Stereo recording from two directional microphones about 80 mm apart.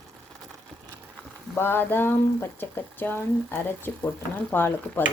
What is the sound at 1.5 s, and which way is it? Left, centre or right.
Speech, left.